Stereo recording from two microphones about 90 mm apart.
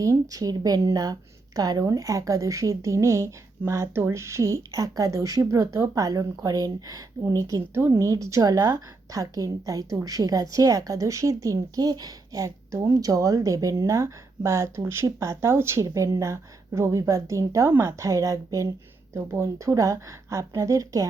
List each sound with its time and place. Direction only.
0.0 s speech: 40° right (ahead or behind)